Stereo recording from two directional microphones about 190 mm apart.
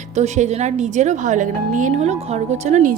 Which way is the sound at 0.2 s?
35° right (ahead or behind).